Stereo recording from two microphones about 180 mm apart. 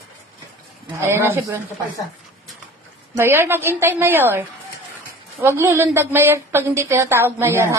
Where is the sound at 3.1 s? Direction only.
15° right (ahead or behind).